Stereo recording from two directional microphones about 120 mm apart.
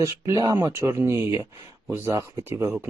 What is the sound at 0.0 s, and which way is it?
Speech, 30° right (ahead or behind).